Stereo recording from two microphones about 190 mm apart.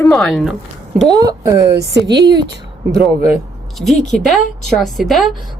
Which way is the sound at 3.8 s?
Centre (ahead or behind).